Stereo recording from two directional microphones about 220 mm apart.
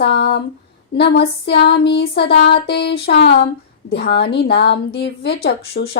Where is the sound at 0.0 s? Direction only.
50° left (ahead or behind).